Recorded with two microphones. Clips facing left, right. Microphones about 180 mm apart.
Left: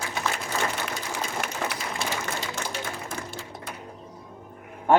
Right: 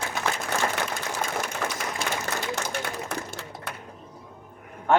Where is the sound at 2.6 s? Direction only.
65° right (ahead or behind).